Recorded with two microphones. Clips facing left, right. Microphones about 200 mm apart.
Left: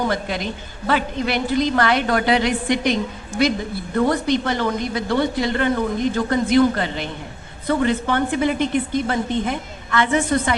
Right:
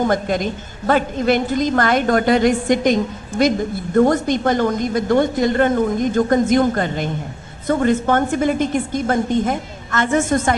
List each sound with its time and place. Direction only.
0.0 s a woman's voice: 50° right (ahead or behind)